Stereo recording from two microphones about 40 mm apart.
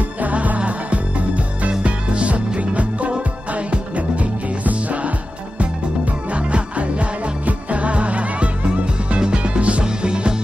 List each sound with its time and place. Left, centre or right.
0.2 s music: right
6.3 s music: right